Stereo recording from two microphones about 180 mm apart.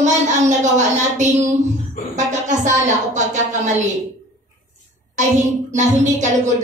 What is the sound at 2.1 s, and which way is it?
A woman's voice, 40° right (ahead or behind).